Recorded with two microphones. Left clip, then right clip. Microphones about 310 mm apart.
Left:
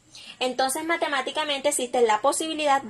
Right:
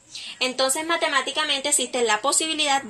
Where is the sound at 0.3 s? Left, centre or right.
Left.